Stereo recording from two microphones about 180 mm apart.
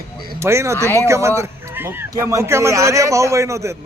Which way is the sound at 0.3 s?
15° right (ahead or behind).